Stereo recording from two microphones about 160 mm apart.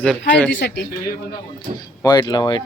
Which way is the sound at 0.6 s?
90° left.